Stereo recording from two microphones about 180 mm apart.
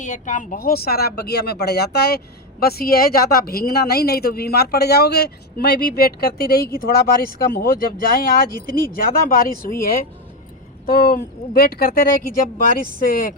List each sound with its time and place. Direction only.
0.0 s speech: 45° left (ahead or behind)
10.8 s speech: 50° left (ahead or behind)